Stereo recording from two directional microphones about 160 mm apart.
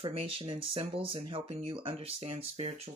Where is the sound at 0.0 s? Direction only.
35° right (ahead or behind).